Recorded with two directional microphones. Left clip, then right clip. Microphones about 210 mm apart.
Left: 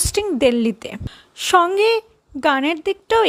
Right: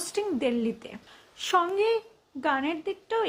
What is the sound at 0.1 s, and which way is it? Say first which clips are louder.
A woman's voice: left 11 dB; 45° left (ahead or behind).